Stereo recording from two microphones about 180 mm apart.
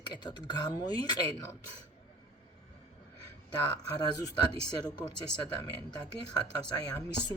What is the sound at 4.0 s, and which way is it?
Speech, 20° left (ahead or behind).